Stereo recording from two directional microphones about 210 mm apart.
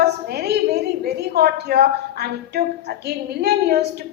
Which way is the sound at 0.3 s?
50° right (ahead or behind).